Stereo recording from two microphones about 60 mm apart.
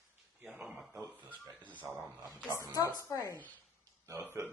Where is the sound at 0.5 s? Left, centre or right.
Centre.